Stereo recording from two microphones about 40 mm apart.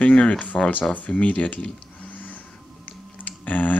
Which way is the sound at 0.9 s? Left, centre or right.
Left.